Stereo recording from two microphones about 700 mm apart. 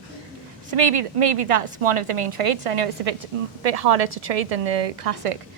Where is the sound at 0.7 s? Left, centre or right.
Right.